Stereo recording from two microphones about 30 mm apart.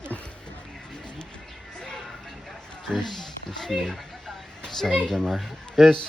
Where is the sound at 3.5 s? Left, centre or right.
Left.